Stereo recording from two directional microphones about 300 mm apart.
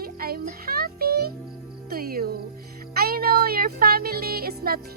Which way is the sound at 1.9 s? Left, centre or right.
Right.